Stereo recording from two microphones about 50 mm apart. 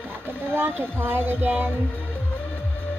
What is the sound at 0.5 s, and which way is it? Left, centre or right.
Speech, right.